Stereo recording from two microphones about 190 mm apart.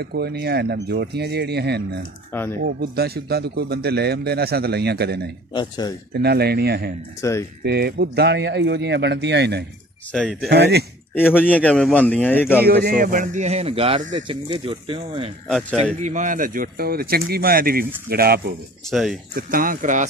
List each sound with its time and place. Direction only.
0.0 s a man's voice: 60° right (ahead or behind)
5.5 s speech: 25° left (ahead or behind)
6.1 s a man's voice: 55° right (ahead or behind)
7.2 s a man's voice: 15° left (ahead or behind)
7.6 s a man's voice: 60° right (ahead or behind)
10.1 s speech: centre (ahead or behind)
10.5 s a man's voice: 60° right (ahead or behind)
11.3 s a man's voice: 5° left (ahead or behind)
12.6 s speech: 55° right (ahead or behind); by 15.3 s 30° right (ahead or behind)
15.4 s speech: centre (ahead or behind)
16.0 s speech: 40° right (ahead or behind)
18.9 s speech: centre (ahead or behind)
19.3 s speech: 50° right (ahead or behind)